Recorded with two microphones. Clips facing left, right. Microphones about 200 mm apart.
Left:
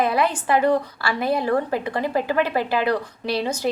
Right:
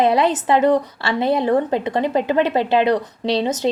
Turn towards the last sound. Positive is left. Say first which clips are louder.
# right 5 dB
turn(degrees=-20)  # may be behind; listen again after turning